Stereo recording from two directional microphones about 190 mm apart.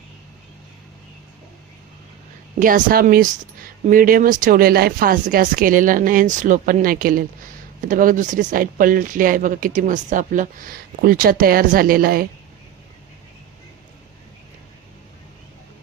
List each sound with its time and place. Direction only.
2.6 s speech: 45° right (ahead or behind)